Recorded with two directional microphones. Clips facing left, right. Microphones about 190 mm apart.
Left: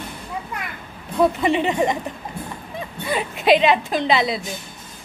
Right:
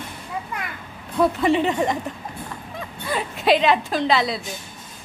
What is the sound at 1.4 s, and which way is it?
Speech, 10° left (ahead or behind).